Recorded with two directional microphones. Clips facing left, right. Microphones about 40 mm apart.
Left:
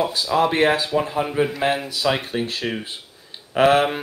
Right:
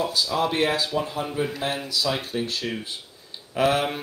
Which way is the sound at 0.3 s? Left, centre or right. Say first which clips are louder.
Left 7 dB; left.